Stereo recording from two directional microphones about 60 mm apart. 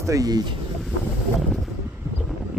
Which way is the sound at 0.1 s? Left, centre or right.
Right.